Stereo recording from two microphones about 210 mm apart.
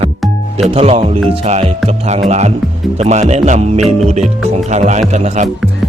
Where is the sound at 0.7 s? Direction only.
30° right (ahead or behind).